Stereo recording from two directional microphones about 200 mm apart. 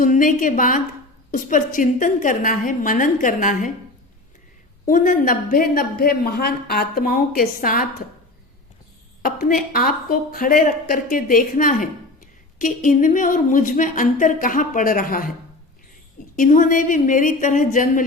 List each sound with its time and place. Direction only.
0.0 s speech: 40° left (ahead or behind)
4.9 s a woman's voice: 40° left (ahead or behind)
9.2 s a woman's voice: 50° left (ahead or behind)
16.3 s speech: 40° left (ahead or behind)